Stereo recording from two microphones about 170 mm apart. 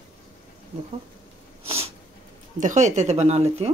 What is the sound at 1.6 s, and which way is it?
Sneeze, 35° right (ahead or behind).